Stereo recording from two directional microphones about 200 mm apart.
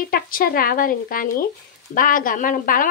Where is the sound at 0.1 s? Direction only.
45° left (ahead or behind).